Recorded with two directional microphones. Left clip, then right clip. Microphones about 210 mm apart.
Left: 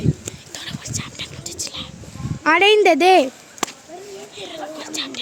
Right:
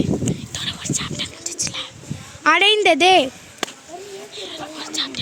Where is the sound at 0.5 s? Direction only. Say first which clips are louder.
Right 5 dB; 15° left (ahead or behind).